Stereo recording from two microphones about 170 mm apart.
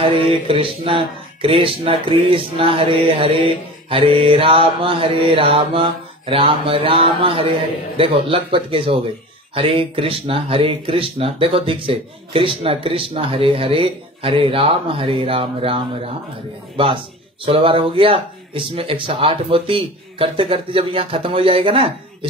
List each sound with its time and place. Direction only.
0.0 s speech: 30° right (ahead or behind)